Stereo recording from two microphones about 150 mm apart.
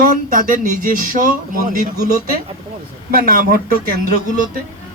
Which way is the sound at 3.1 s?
70° right (ahead or behind).